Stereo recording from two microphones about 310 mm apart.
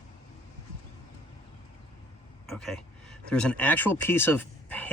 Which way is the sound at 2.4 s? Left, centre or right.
Centre.